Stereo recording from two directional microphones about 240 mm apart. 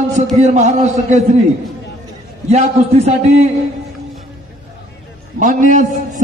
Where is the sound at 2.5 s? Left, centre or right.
Right.